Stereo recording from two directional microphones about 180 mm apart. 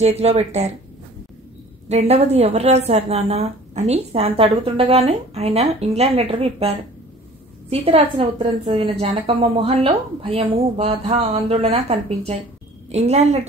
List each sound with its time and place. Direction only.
0.0 s a woman's voice: 35° right (ahead or behind)
1.9 s a woman's voice: 35° right (ahead or behind)